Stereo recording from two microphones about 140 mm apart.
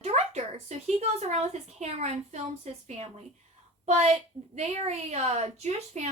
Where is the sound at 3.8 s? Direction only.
50° right (ahead or behind).